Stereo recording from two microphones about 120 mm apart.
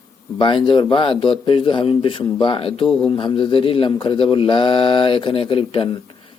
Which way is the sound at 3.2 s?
45° left (ahead or behind).